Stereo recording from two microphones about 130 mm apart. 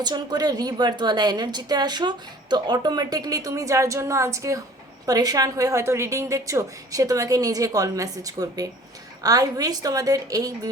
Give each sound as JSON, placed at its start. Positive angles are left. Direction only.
{"t": 0.0, "sound": "a woman's voice", "side_deg": -30}